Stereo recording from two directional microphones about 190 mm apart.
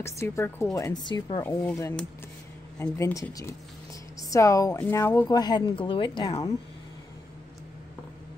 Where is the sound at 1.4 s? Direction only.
10° left (ahead or behind).